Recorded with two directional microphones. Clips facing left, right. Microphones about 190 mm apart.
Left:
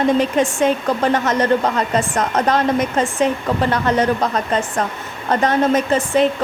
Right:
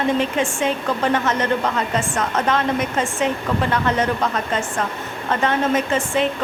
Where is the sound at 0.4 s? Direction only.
40° left (ahead or behind).